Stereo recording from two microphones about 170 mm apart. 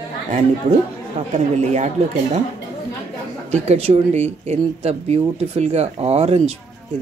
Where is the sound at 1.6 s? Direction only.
40° right (ahead or behind).